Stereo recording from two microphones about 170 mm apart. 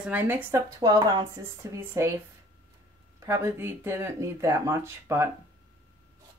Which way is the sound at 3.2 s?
15° right (ahead or behind).